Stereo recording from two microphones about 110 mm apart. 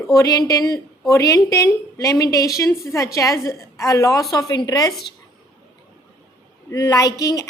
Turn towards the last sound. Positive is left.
turn(degrees=35)  # may be behind; listen again after turning